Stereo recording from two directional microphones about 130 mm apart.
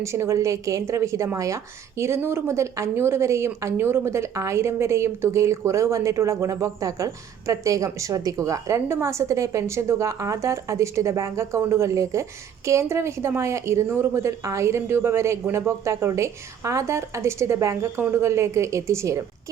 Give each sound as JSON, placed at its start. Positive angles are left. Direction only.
{"t": 0.0, "sound": "a woman's voice", "side_deg": -20}